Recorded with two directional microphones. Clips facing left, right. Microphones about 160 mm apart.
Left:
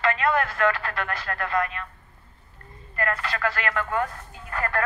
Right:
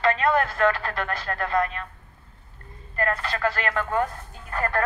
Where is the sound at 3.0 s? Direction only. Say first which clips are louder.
Right 2 dB; 25° right (ahead or behind).